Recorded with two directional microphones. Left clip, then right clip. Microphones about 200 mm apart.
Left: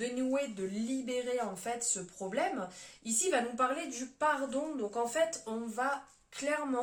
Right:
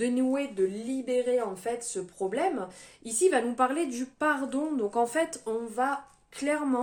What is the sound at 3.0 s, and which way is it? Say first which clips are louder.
A woman's voice: right 7 dB; 40° right (ahead or behind).